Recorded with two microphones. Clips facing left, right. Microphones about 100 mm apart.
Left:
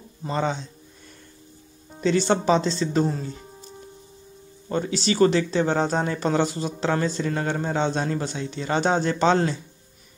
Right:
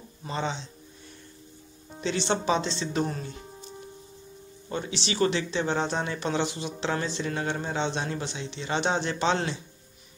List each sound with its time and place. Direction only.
0.3 s speech: 45° left (ahead or behind)
2.0 s a man's voice: 45° left (ahead or behind)
3.1 s speech: 25° left (ahead or behind)
4.6 s a man's voice: 40° left (ahead or behind)